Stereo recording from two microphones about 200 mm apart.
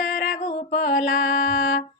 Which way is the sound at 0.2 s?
40° left (ahead or behind).